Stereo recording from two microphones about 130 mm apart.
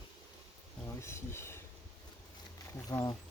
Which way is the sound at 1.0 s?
20° left (ahead or behind).